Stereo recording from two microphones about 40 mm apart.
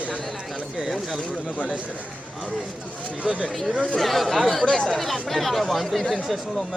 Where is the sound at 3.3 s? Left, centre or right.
Right.